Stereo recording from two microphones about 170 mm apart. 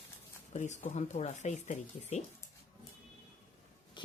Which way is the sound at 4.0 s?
30° left (ahead or behind).